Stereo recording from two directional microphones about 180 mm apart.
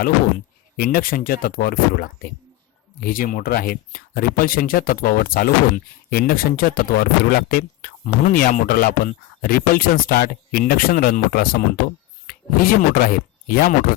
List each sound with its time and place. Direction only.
0.8 s speech: 50° left (ahead or behind)